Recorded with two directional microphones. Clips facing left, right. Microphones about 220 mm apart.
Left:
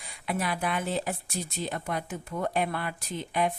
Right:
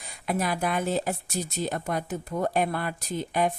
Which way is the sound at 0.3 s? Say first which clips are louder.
Right 3 dB; 45° right (ahead or behind).